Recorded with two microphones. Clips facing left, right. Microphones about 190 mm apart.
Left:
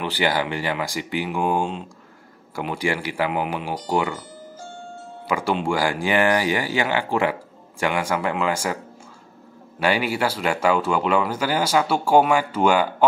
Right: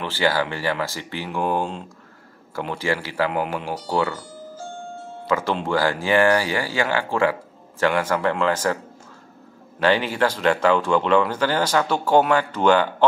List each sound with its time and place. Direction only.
0.0 s speech: 15° left (ahead or behind)
5.2 s speech: 10° left (ahead or behind)
9.8 s speech: 10° left (ahead or behind)